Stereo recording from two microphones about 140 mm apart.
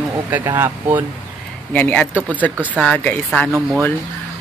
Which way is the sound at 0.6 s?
15° right (ahead or behind).